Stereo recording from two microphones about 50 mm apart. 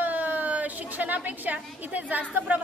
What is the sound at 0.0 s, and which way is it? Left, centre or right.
A woman's voice, right.